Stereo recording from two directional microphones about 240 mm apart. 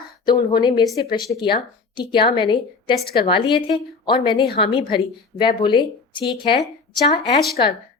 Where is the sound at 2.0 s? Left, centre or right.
Centre.